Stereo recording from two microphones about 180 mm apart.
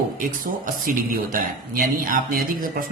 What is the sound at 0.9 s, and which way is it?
Speech, 50° right (ahead or behind).